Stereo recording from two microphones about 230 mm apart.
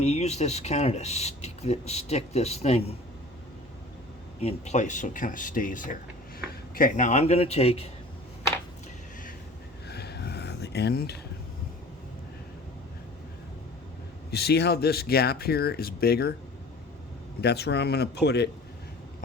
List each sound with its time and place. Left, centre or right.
0.0 s speech: left
4.4 s speech: left
9.8 s a sound: left
14.3 s speech: left
17.4 s speech: left